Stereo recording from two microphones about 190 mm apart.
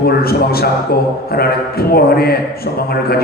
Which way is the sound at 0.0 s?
55° left (ahead or behind).